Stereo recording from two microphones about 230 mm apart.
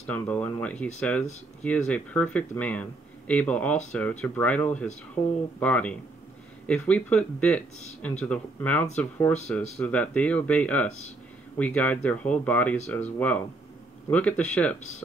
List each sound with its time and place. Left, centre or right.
0.1 s speech: centre